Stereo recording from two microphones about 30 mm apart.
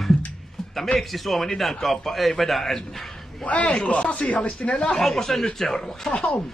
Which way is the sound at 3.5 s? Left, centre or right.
Left.